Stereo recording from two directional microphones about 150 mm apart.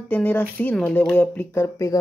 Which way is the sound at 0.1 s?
10° left (ahead or behind).